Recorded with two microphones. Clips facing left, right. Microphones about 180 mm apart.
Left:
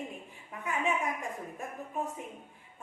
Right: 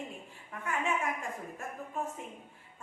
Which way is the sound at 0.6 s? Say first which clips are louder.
Left 1 dB; 15° left (ahead or behind).